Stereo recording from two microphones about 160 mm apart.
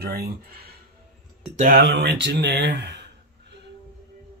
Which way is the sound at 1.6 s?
70° right (ahead or behind).